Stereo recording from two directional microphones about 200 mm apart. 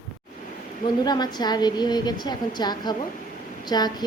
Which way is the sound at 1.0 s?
20° left (ahead or behind).